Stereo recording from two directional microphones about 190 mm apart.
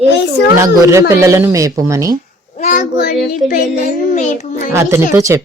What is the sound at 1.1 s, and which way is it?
Speech, 15° right (ahead or behind).